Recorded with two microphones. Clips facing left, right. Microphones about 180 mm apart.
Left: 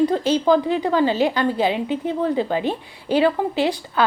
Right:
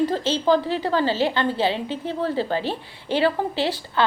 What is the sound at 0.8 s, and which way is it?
A woman's voice, 15° left (ahead or behind).